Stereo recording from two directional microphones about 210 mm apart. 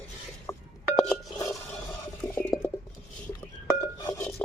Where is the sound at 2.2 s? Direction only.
10° left (ahead or behind).